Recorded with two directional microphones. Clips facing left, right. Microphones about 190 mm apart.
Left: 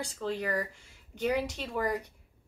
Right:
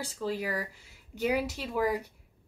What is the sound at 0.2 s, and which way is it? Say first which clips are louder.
A woman's voice: even; 5° right (ahead or behind).